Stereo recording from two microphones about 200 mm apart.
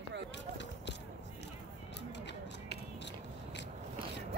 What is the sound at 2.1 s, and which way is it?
Scissors, 60° left (ahead or behind).